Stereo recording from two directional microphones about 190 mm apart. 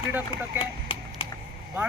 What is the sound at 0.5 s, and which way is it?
Chop, 30° left (ahead or behind).